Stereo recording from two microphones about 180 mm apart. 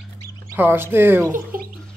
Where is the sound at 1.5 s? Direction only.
50° right (ahead or behind).